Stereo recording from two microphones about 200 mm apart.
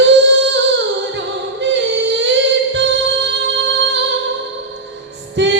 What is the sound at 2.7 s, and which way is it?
Music, 60° right (ahead or behind).